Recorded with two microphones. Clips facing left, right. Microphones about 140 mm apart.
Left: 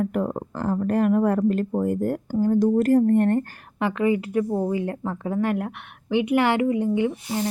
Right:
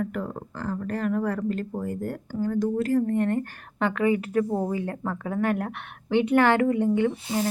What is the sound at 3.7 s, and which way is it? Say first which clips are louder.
A woman's voice: left 1 dB; 20° left (ahead or behind).